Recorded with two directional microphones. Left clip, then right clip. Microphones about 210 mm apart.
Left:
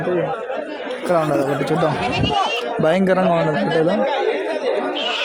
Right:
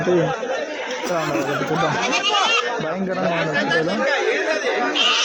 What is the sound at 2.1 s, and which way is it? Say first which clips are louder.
Speech: right 1 dB; 35° right (ahead or behind).